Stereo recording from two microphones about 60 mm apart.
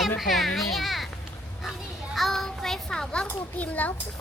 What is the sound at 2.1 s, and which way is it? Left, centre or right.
Child singing, centre.